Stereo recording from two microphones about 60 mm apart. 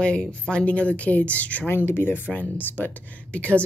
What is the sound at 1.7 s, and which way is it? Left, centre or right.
A woman's voice, left.